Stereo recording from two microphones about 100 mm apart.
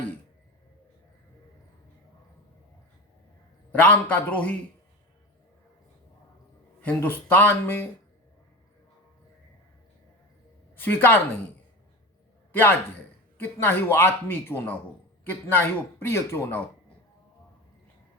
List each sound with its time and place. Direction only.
3.7 s a man's voice: 20° left (ahead or behind)
6.8 s speech: 20° left (ahead or behind)
10.8 s speech: 20° left (ahead or behind)
13.4 s speech: 20° left (ahead or behind)